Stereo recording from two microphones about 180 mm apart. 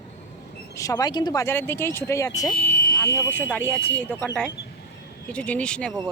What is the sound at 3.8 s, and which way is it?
Speech, 85° left.